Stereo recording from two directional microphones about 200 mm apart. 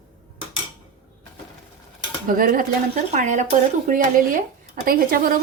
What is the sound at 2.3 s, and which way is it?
Speech, 45° right (ahead or behind).